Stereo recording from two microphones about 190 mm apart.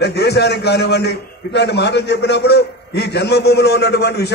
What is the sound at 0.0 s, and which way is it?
A man's voice, 60° left (ahead or behind).